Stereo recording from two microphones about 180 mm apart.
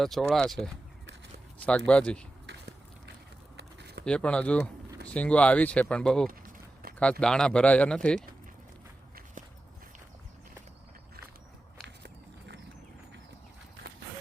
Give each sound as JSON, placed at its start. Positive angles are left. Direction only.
{"t": 0.0, "sound": "speech", "side_deg": 0}
{"t": 3.6, "sound": "a sound", "side_deg": -70}
{"t": 4.0, "sound": "speech", "side_deg": 5}